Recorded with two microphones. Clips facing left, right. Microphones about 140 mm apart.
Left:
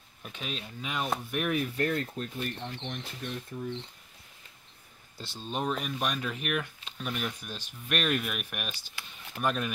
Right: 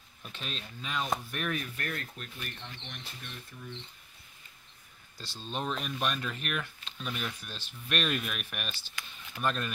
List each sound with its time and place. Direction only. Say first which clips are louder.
0.2 s speech: left 3 dB; 10° left (ahead or behind)
1.8 s speech: left 9 dB; 25° left (ahead or behind); by 3.7 s 40° left (ahead or behind)
5.1 s speech: left 4 dB; 20° left (ahead or behind)
5.4 s speech: left 3 dB; 10° left (ahead or behind)